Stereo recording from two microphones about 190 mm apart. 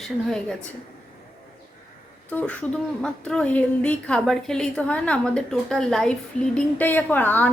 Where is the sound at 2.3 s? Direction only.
5° left (ahead or behind).